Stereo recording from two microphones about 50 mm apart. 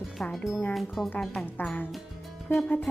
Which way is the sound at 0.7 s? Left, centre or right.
Centre.